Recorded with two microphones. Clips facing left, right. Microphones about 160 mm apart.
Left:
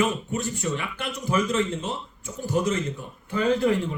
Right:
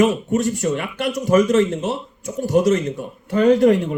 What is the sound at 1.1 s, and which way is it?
Speech, 85° right.